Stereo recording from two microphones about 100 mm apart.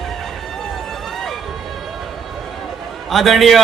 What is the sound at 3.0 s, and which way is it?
Speech, centre (ahead or behind).